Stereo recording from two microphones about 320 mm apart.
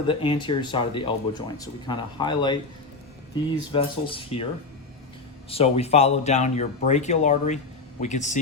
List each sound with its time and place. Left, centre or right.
0.1 s speech: centre
3.7 s speech: centre
5.5 s speech: centre